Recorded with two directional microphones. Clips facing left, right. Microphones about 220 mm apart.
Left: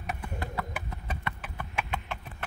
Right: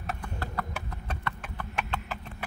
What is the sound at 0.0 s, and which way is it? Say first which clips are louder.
Clip-clop: even; 15° left (ahead or behind).